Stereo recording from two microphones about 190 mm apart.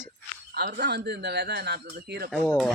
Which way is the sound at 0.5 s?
60° right (ahead or behind).